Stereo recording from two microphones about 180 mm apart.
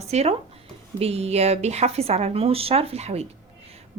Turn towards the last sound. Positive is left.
turn(degrees=-35)  # may be behind; listen again after turning